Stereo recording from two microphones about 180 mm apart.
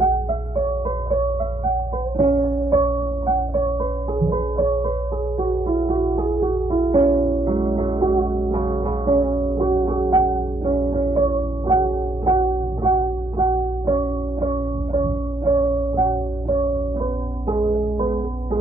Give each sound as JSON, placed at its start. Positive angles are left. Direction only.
{"t": 0.0, "sound": "music", "side_deg": -30}
{"t": 2.1, "sound": "music", "side_deg": -30}
{"t": 17.5, "sound": "music", "side_deg": -30}